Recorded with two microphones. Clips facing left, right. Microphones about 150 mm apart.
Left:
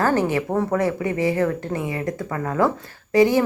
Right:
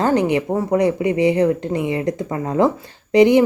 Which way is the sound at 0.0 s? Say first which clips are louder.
Right 3 dB; 20° right (ahead or behind).